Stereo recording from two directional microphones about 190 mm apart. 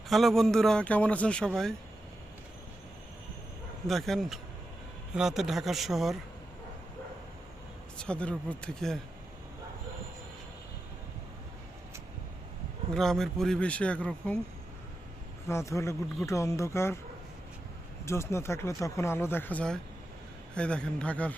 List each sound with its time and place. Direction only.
0.1 s speech: centre (ahead or behind)
3.8 s speech: centre (ahead or behind)
7.9 s speech: 5° left (ahead or behind)
12.9 s speech: centre (ahead or behind)
15.4 s a man's voice: 15° left (ahead or behind)
18.0 s a man's voice: 15° left (ahead or behind)